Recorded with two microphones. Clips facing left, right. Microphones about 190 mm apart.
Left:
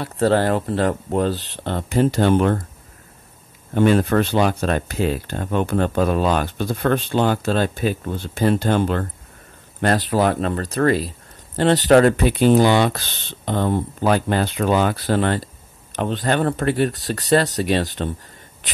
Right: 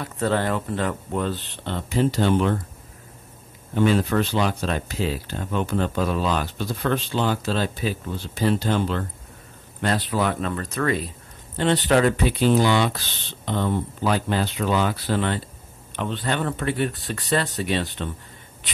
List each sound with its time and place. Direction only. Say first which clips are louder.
0.0 s speech: left 6 dB; 35° left (ahead or behind)
3.7 s speech: left 4 dB; 55° left (ahead or behind)